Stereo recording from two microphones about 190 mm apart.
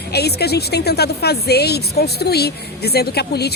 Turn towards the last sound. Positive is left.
turn(degrees=55)  # may be behind; listen again after turning